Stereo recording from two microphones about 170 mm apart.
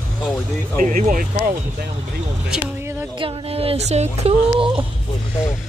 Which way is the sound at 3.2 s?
35° right (ahead or behind).